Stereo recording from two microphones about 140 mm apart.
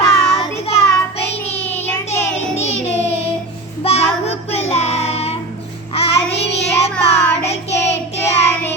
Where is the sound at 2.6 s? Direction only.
50° left (ahead or behind).